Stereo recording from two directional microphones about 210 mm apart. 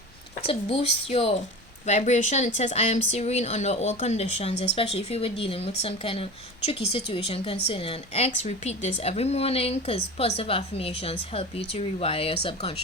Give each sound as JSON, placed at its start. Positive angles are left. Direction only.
{"t": 0.4, "sound": "a woman's voice", "side_deg": 30}